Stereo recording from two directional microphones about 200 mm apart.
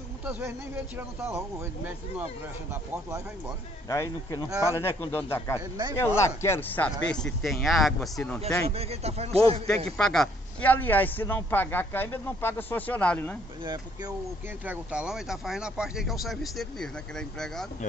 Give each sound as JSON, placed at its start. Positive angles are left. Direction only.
{"t": 0.2, "sound": "speech", "side_deg": -10}
{"t": 3.9, "sound": "speech", "side_deg": 15}
{"t": 4.5, "sound": "speech", "side_deg": -15}
{"t": 4.7, "sound": "speech", "side_deg": 10}
{"t": 5.6, "sound": "speech", "side_deg": -20}
{"t": 5.9, "sound": "speech", "side_deg": 15}
{"t": 8.6, "sound": "a man's voice", "side_deg": -30}
{"t": 9.8, "sound": "speech", "side_deg": 5}
{"t": 14.6, "sound": "speech", "side_deg": -5}